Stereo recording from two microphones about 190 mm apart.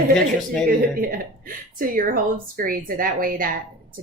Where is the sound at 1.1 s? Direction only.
45° right (ahead or behind).